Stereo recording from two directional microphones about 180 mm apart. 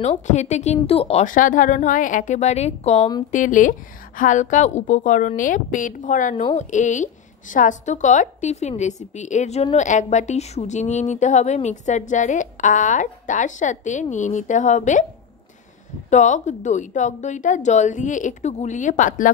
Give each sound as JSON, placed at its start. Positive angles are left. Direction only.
{"t": 0.0, "sound": "a woman's voice", "side_deg": 40}
{"t": 16.1, "sound": "a woman's voice", "side_deg": 40}